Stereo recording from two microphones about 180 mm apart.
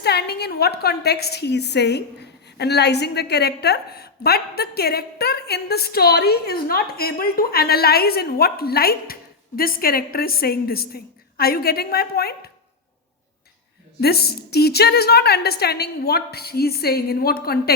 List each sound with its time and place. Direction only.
0.0 s a woman's voice: 65° left (ahead or behind)
14.0 s a woman's voice: 60° left (ahead or behind)